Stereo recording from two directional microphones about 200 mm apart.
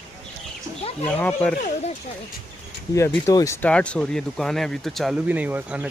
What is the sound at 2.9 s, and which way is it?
Speech, 15° left (ahead or behind).